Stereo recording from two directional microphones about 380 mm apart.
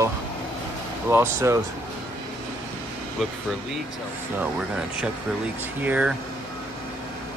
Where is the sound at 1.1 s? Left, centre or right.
Centre.